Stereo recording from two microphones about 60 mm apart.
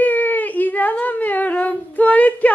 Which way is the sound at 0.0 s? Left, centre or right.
Left.